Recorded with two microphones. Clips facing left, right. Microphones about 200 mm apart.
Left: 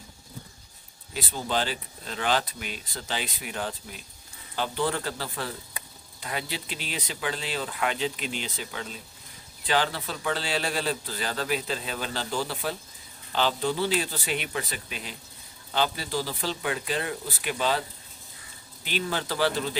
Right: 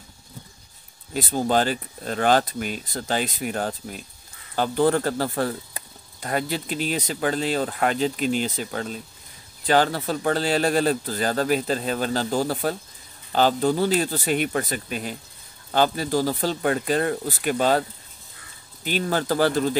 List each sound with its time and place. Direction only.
1.1 s speech: 45° right (ahead or behind)
18.9 s speech: 45° right (ahead or behind)